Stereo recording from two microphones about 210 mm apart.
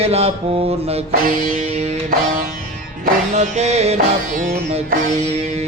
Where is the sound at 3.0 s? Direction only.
35° right (ahead or behind).